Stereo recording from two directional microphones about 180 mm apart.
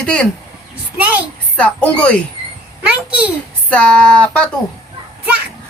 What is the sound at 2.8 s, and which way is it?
Speech, 5° right (ahead or behind).